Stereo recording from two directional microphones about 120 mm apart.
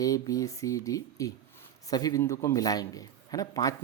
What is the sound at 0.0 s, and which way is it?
A man's voice, 30° left (ahead or behind).